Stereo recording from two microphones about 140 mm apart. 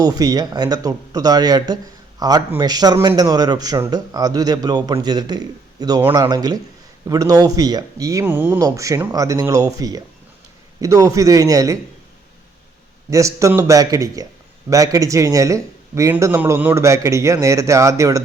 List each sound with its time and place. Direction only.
0.0 s speech: 25° right (ahead or behind)
6.0 s speech: 15° right (ahead or behind)
6.2 s speech: 30° right (ahead or behind)
13.1 s speech: 20° right (ahead or behind)